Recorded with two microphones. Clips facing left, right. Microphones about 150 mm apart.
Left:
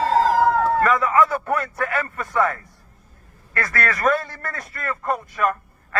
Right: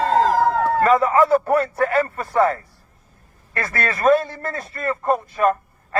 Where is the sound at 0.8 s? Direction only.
30° right (ahead or behind).